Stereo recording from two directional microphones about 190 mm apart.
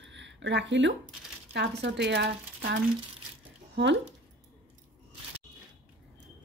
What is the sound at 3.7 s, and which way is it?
Speech, 70° right (ahead or behind).